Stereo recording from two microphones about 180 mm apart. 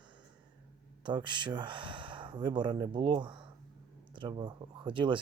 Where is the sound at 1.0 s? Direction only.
25° right (ahead or behind).